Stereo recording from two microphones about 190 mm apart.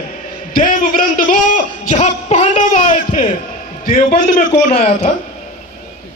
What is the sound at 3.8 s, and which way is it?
Speech, 50° left (ahead or behind).